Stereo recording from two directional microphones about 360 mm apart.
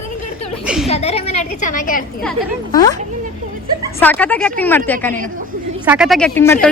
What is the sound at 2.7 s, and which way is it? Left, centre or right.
Speech, centre.